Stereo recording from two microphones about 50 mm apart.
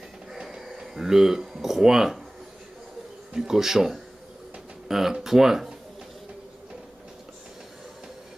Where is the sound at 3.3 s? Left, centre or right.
Centre.